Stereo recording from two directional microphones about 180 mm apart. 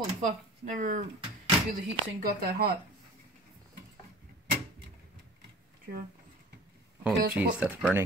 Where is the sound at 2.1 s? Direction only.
60° right (ahead or behind).